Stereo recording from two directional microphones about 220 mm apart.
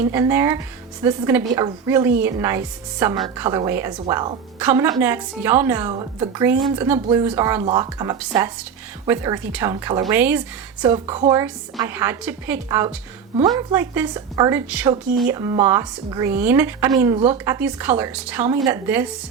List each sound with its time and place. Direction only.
0.1 s a woman's voice: 10° right (ahead or behind)
5.9 s speech: 20° right (ahead or behind)
6.7 s a woman's voice: 10° right (ahead or behind)
10.9 s speech: 25° right (ahead or behind)
11.3 s a woman's voice: 10° right (ahead or behind)